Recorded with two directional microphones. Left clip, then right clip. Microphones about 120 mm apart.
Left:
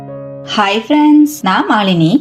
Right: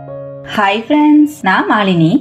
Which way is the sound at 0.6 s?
40° left (ahead or behind).